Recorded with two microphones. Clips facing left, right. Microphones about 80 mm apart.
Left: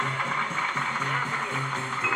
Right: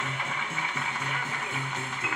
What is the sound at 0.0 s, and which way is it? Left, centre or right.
Music, left.